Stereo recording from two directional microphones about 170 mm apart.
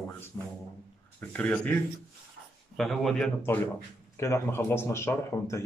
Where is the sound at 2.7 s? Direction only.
Centre (ahead or behind).